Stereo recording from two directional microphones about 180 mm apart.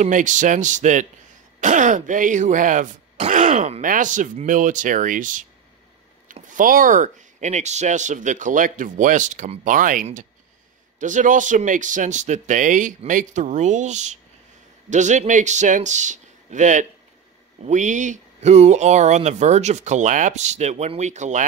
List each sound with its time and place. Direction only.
0.0 s speech: 45° right (ahead or behind)